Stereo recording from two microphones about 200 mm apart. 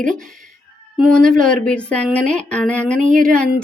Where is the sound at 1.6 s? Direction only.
5° left (ahead or behind).